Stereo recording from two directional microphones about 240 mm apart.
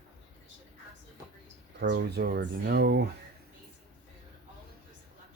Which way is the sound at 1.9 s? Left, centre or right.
Right.